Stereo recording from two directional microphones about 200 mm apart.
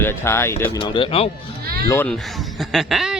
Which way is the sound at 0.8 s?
25° left (ahead or behind).